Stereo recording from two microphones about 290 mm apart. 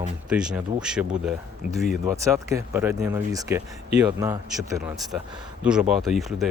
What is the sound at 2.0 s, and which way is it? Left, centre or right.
Speech, centre.